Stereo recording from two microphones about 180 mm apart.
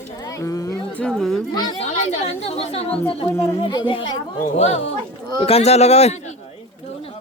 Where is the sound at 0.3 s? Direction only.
20° left (ahead or behind).